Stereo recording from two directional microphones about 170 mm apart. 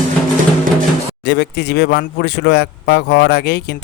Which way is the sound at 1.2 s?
75° left (ahead or behind).